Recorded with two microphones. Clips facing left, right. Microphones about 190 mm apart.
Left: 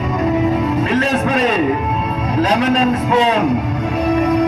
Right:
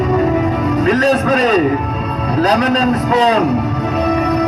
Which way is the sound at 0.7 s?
40° right (ahead or behind).